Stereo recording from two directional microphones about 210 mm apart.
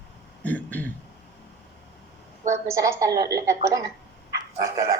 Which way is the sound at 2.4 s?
15° right (ahead or behind).